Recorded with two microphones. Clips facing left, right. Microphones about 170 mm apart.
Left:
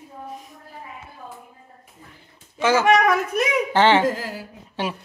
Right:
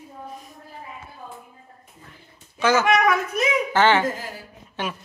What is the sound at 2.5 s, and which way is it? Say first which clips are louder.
Speech: left 2 dB; 25° left (ahead or behind).